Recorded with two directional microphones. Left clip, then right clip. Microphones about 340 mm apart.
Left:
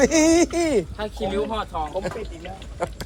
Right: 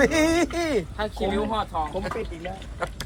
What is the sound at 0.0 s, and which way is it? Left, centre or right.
Speech, centre.